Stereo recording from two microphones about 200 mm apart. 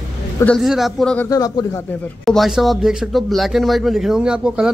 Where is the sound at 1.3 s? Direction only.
20° left (ahead or behind).